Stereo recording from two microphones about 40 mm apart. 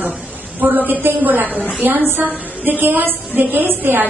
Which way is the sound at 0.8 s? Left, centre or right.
Right.